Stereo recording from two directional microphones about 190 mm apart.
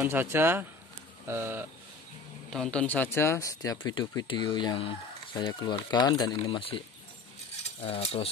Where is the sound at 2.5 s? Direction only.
5° left (ahead or behind).